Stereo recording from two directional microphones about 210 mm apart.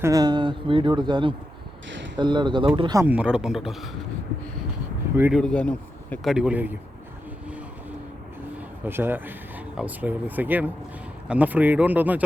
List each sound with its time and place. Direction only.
0.0 s speech: 15° right (ahead or behind); by 3.8 s centre (ahead or behind)
5.1 s speech: 10° right (ahead or behind)
5.4 s speech: 5° left (ahead or behind)
7.4 s vehicle: 5° right (ahead or behind)
8.5 s speech: 10° right (ahead or behind)